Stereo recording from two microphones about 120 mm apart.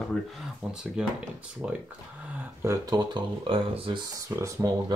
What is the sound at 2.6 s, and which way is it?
Speech, 30° right (ahead or behind).